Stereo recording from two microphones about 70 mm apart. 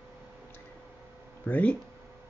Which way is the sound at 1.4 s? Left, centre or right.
Left.